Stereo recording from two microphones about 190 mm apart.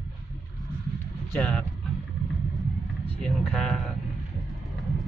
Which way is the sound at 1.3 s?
5° left (ahead or behind).